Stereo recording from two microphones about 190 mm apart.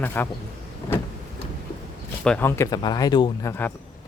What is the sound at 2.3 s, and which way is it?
Speech, 10° left (ahead or behind).